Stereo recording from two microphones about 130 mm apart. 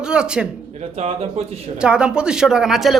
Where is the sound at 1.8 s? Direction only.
5° right (ahead or behind).